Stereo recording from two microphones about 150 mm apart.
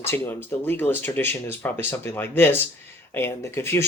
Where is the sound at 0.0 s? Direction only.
15° left (ahead or behind).